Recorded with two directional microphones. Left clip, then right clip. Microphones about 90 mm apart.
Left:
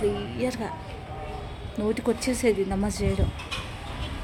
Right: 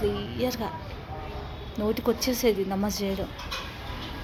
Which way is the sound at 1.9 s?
30° left (ahead or behind).